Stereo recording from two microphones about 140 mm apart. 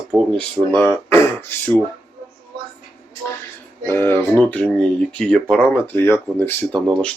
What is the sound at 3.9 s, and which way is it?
Speech, 15° left (ahead or behind).